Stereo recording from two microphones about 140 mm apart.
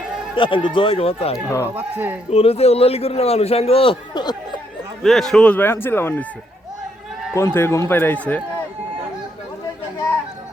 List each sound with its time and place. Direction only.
0.3 s speech: 35° left (ahead or behind)
1.6 s speech: 15° right (ahead or behind)
2.3 s a man's voice: 45° left (ahead or behind); by 4.6 s 30° left (ahead or behind)
5.0 s a man's voice: centre (ahead or behind)
7.3 s a man's voice: 15° left (ahead or behind)